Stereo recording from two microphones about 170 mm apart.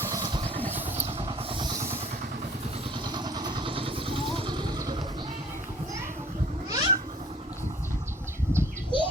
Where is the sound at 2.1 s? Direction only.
55° right (ahead or behind).